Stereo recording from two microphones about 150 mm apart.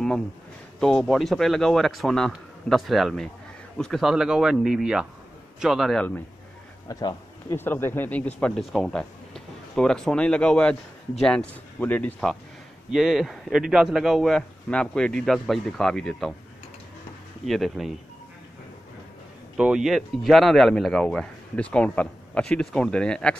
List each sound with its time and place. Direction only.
0.7 s speech: 5° left (ahead or behind)
6.9 s speech: 25° left (ahead or behind)
7.5 s speech: 15° left (ahead or behind)
12.9 s speech: 5° right (ahead or behind)
17.5 s speech: centre (ahead or behind)
19.5 s speech: 5° right (ahead or behind)